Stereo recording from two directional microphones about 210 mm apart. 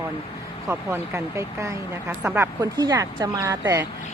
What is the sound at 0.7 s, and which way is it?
A woman's voice, 10° right (ahead or behind).